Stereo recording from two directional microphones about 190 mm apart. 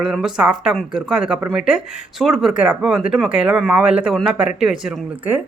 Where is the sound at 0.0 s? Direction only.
5° right (ahead or behind).